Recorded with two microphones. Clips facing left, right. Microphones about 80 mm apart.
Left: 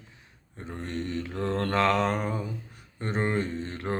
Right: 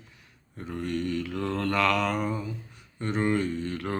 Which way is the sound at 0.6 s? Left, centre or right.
Left.